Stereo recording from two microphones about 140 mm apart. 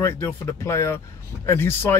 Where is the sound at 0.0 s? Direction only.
20° left (ahead or behind).